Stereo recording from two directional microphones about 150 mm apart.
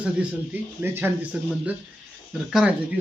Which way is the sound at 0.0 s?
10° right (ahead or behind).